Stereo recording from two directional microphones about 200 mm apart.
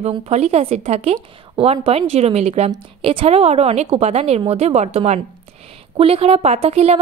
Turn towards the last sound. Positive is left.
turn(degrees=-30)  # may be behind; listen again after turning